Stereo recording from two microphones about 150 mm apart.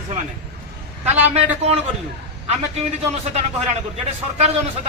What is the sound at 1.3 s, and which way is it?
Speech, 45° right (ahead or behind).